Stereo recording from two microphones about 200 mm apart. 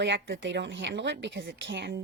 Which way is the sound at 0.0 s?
65° right (ahead or behind).